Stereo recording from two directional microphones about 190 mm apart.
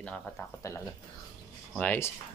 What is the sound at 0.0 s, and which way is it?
Speech, 5° left (ahead or behind).